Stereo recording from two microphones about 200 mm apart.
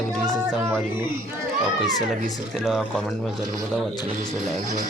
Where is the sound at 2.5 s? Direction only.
Centre (ahead or behind).